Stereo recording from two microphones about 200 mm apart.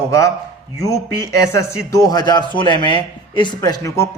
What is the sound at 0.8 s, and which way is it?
A man's voice, 15° left (ahead or behind).